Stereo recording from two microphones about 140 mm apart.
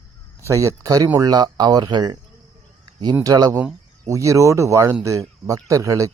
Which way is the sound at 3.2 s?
25° right (ahead or behind).